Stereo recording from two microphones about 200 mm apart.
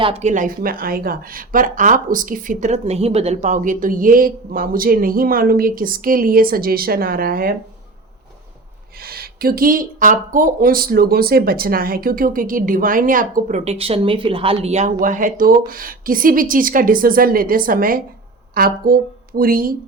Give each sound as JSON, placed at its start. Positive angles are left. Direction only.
{"t": 0.0, "sound": "speech", "side_deg": -30}
{"t": 9.0, "sound": "speech", "side_deg": -50}